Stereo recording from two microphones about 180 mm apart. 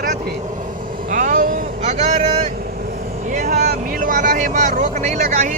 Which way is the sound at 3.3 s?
45° right (ahead or behind).